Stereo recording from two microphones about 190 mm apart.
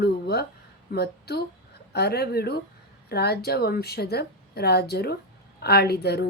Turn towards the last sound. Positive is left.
turn(degrees=60)  # may be behind; listen again after turning